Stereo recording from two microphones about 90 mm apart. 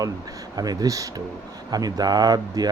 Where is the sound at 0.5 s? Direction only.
45° right (ahead or behind).